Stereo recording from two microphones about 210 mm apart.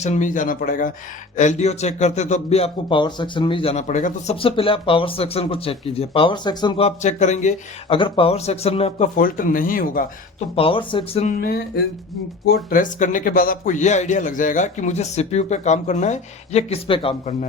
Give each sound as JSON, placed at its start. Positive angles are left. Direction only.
{"t": 0.0, "sound": "a man's voice", "side_deg": 35}
{"t": 9.1, "sound": "a man's voice", "side_deg": 40}
{"t": 10.5, "sound": "a man's voice", "side_deg": 25}
{"t": 11.3, "sound": "music", "side_deg": 45}
{"t": 12.5, "sound": "a man's voice", "side_deg": 45}